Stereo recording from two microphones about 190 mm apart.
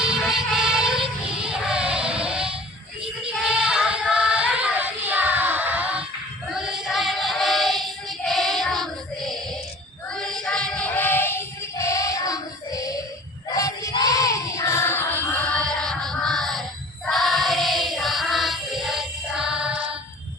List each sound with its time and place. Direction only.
0.0 s music: 5° right (ahead or behind)
3.2 s child singing: 5° right (ahead or behind)
6.7 s music: centre (ahead or behind); by 13.0 s 20° left (ahead or behind)
13.5 s child singing: 20° left (ahead or behind); by 16.6 s centre (ahead or behind)
17.1 s music: centre (ahead or behind)